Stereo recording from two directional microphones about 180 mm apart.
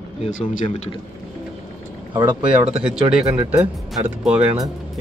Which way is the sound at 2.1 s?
25° right (ahead or behind).